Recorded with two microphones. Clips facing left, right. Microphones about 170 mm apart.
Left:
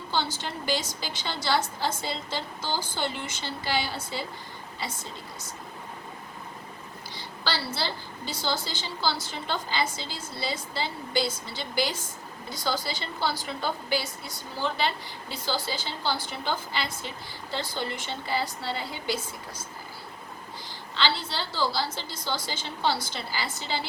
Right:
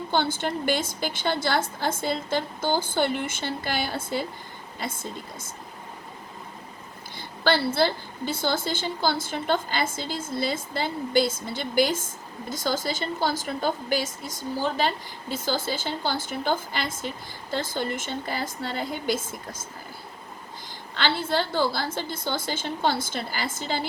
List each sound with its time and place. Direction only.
0.1 s a woman's voice: 55° right (ahead or behind)
7.2 s a woman's voice: 50° right (ahead or behind)
20.9 s a woman's voice: 50° right (ahead or behind)